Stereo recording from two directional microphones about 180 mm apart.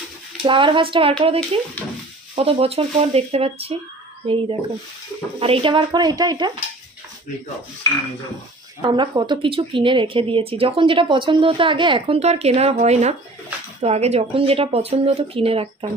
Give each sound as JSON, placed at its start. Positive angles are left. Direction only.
{"t": 0.5, "sound": "speech", "side_deg": -30}
{"t": 8.8, "sound": "speech", "side_deg": -25}